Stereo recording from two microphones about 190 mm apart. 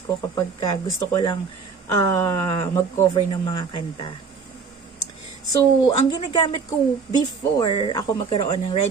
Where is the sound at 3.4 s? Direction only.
25° left (ahead or behind).